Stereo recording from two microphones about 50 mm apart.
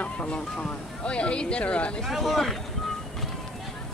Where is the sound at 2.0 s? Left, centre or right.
Centre.